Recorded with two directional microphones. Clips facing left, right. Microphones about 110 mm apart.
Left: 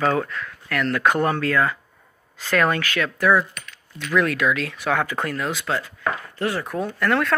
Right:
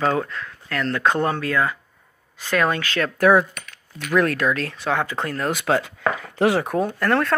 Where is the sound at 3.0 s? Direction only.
50° right (ahead or behind).